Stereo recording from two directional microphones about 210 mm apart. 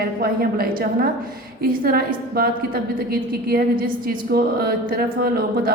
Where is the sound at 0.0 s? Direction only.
45° right (ahead or behind).